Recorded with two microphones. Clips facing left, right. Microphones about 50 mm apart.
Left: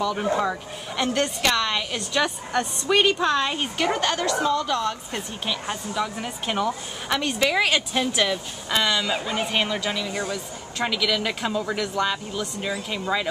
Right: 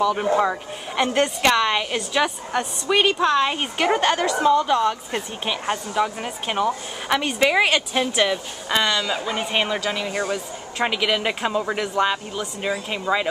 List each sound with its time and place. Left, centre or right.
0.0 s a woman's voice: centre
3.5 s a woman's voice: centre
8.8 s a man's voice: centre